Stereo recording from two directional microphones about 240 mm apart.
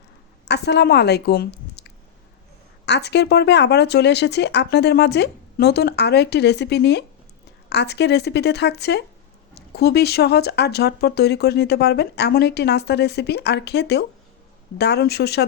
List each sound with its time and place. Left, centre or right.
0.4 s a woman's voice: left